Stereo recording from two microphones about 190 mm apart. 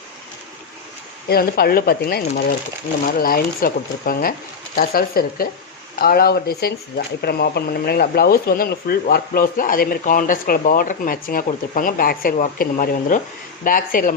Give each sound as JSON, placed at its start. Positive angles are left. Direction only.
{"t": 1.3, "sound": "speech", "side_deg": 55}